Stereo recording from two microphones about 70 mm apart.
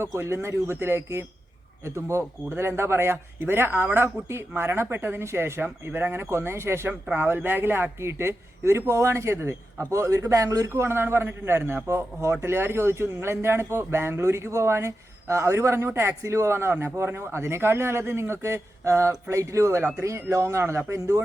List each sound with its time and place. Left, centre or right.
0.2 s a man's voice: right
9.9 s a man's voice: right